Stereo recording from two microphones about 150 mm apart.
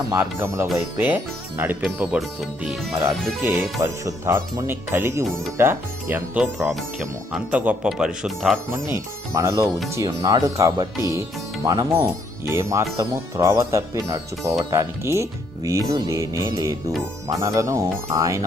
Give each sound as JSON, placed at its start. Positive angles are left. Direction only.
{"t": 0.1, "sound": "speech", "side_deg": -15}
{"t": 3.0, "sound": "speech", "side_deg": -20}
{"t": 9.3, "sound": "speech", "side_deg": -20}